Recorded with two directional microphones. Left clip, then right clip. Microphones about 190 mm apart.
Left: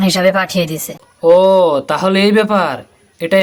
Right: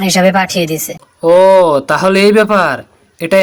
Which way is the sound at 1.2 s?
20° right (ahead or behind).